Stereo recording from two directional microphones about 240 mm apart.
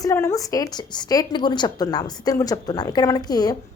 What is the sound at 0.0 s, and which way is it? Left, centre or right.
A woman's voice, centre.